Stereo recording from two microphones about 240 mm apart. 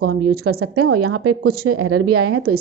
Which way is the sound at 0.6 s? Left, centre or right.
Right.